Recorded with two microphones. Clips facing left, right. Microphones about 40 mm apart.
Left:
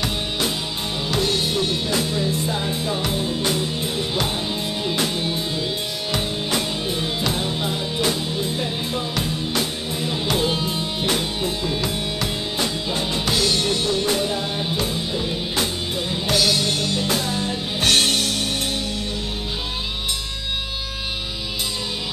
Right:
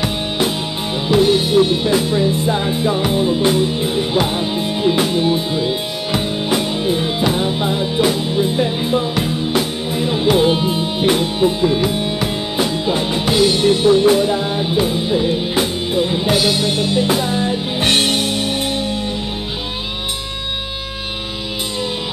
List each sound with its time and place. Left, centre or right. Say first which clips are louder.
1.0 s music: right 9 dB; centre